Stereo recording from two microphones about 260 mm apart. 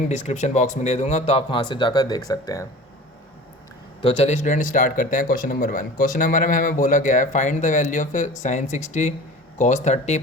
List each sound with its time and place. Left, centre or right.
0.1 s speech: left
4.0 s speech: left